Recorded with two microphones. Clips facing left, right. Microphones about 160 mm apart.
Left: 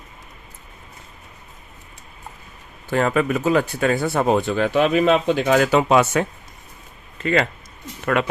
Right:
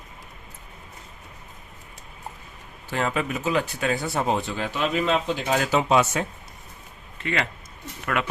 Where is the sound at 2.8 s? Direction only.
50° left (ahead or behind).